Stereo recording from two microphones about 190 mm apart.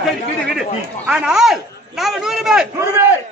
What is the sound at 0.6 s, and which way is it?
A man's voice, 5° right (ahead or behind).